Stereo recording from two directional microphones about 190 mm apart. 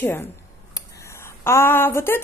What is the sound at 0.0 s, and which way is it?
A woman's voice, 10° left (ahead or behind).